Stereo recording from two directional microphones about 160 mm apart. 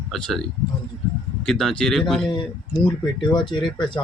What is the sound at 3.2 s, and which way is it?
Speech, 30° left (ahead or behind).